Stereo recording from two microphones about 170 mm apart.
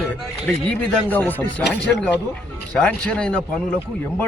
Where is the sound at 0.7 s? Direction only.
5° left (ahead or behind).